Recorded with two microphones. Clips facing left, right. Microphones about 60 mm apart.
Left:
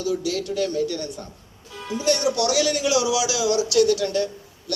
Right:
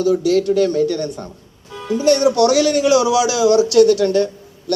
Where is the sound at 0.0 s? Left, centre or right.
Right.